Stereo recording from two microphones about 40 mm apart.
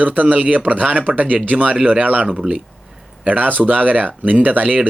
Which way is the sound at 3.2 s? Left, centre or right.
Right.